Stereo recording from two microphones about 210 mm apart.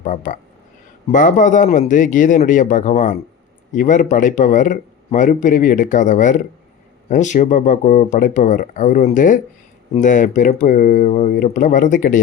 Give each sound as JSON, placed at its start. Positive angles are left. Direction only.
{"t": 0.0, "sound": "speech", "side_deg": 35}